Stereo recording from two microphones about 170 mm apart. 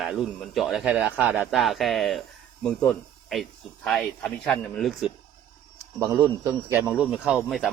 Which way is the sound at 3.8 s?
Centre (ahead or behind).